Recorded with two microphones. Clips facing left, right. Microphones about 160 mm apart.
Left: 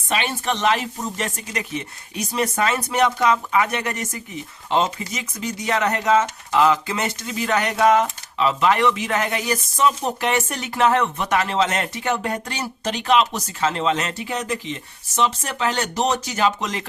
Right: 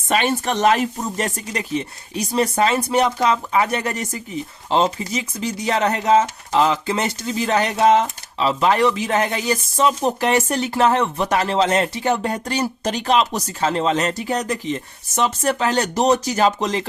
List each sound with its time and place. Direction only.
0.1 s speech: 45° right (ahead or behind)